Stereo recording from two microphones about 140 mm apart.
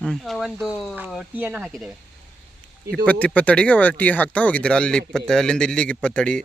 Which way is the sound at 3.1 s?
10° left (ahead or behind).